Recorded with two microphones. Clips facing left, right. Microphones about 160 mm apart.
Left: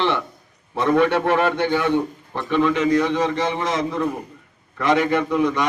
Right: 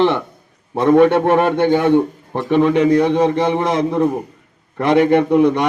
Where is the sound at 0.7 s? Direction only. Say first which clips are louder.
Right 6 dB; 50° right (ahead or behind).